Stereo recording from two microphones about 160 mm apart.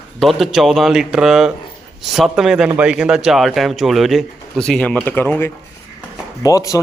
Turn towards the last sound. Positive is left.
turn(degrees=20)  # may be behind; listen again after turning